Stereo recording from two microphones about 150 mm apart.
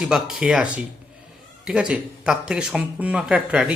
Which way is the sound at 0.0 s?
5° right (ahead or behind).